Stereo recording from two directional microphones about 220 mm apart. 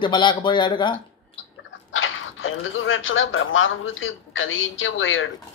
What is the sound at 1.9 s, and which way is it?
Speech, 60° left (ahead or behind).